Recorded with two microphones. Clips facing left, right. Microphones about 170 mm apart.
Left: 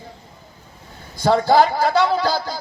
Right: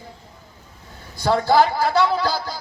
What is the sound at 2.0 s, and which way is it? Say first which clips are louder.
Speech: left 2 dB; 30° left (ahead or behind).